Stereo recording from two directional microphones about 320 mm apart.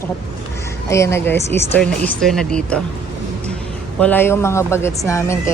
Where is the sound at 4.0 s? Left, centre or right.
Centre.